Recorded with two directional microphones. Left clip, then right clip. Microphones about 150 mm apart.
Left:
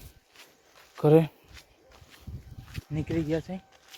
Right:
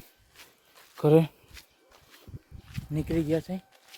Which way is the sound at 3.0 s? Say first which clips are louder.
Right 2 dB; 30° right (ahead or behind).